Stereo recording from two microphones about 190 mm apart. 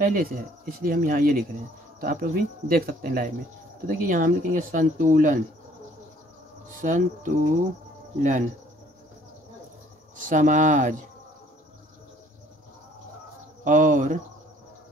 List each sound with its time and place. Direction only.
0.0 s speech: 45° right (ahead or behind)
6.8 s speech: 45° right (ahead or behind)
10.1 s speech: 45° right (ahead or behind)
13.7 s speech: 45° right (ahead or behind)